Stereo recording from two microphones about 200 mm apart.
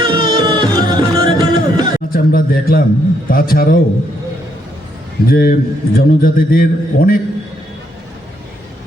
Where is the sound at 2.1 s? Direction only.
45° left (ahead or behind).